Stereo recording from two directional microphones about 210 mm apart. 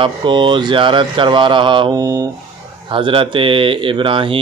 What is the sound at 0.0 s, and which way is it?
Speech, 25° right (ahead or behind).